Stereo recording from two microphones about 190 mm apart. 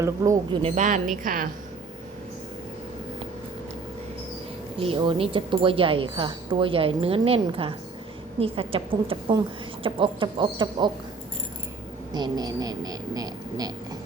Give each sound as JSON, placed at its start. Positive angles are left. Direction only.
{"t": 0.0, "sound": "speech", "side_deg": -15}
{"t": 0.6, "sound": "a woman's voice", "side_deg": -40}
{"t": 4.8, "sound": "speech", "side_deg": -30}
{"t": 12.1, "sound": "speech", "side_deg": -20}